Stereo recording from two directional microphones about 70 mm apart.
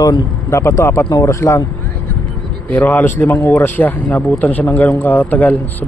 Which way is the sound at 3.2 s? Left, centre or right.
Left.